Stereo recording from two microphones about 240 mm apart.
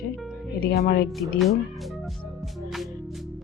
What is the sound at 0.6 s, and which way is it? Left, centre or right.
Speech, left.